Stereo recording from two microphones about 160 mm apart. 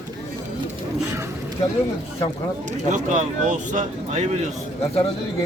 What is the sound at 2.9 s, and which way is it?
Speech, 50° right (ahead or behind).